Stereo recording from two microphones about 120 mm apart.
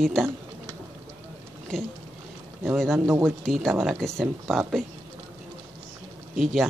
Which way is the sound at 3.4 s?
5° left (ahead or behind).